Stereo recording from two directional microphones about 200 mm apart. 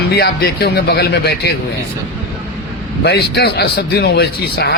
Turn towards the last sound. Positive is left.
turn(degrees=55)  # may be behind; listen again after turning